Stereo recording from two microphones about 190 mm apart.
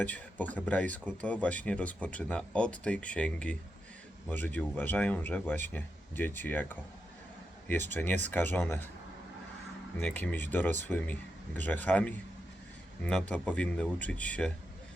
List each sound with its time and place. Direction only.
0.0 s speech: 10° left (ahead or behind)
7.7 s speech: 10° left (ahead or behind)
10.0 s speech: 5° left (ahead or behind)